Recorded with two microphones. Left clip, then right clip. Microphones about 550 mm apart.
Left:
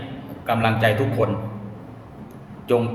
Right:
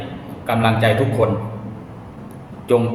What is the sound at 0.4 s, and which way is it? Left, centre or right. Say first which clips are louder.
Speech: right 3 dB; left.